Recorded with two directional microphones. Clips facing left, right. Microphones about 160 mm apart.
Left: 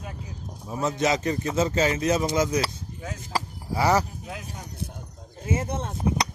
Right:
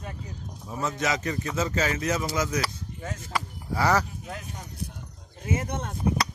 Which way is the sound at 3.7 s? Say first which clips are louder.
Left 2 dB; 20° left (ahead or behind).